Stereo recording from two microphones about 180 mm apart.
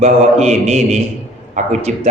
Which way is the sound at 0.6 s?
40° right (ahead or behind).